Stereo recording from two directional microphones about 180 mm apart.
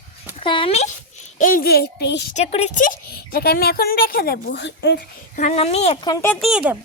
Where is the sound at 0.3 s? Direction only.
30° left (ahead or behind); by 2.2 s 70° left (ahead or behind).